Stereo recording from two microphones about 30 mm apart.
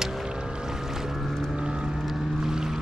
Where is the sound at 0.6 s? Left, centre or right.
Centre.